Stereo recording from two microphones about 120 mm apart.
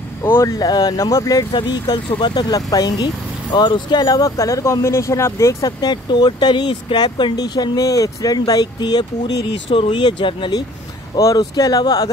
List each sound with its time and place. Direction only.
0.2 s speech: 20° left (ahead or behind); by 10.6 s 40° left (ahead or behind)
11.1 s speech: 30° left (ahead or behind)